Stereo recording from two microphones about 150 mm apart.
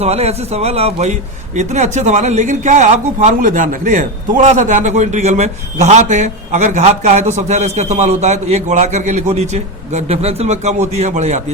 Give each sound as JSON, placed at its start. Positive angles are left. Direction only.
{"t": 0.0, "sound": "a man's voice", "side_deg": -45}